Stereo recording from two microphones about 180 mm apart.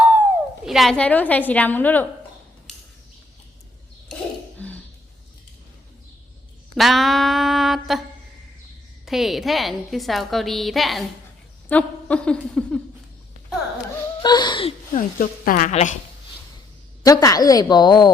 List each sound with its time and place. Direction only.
0.2 s speech: 5° right (ahead or behind)
4.5 s cough: 10° left (ahead or behind)
6.7 s a sound: centre (ahead or behind)
9.0 s a woman's voice: centre (ahead or behind)
14.2 s a sound: 25° left (ahead or behind)
14.9 s speech: 50° left (ahead or behind)
17.0 s a woman's voice: 20° left (ahead or behind)